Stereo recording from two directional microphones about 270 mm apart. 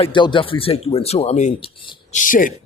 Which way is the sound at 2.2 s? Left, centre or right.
Left.